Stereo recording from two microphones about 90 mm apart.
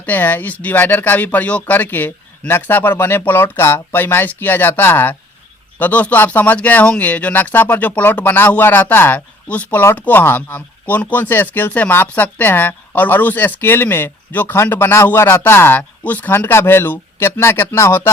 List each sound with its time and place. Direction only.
0.0 s speech: 20° left (ahead or behind)